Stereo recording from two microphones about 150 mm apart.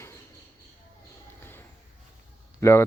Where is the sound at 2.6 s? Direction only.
15° left (ahead or behind).